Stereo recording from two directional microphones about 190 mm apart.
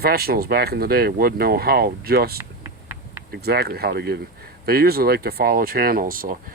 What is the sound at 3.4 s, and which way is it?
Speech, 55° right (ahead or behind).